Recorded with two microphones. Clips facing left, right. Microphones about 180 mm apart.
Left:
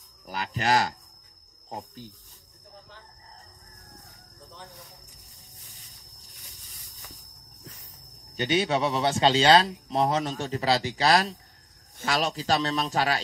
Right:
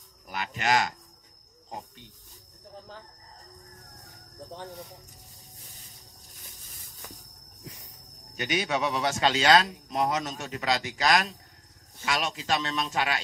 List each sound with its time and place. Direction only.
0.3 s speech: 35° left (ahead or behind)
8.4 s a man's voice: 30° left (ahead or behind)